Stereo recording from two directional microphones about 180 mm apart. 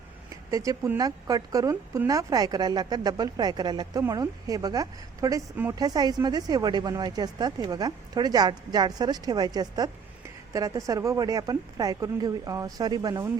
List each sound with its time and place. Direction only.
0.3 s a woman's voice: 20° right (ahead or behind)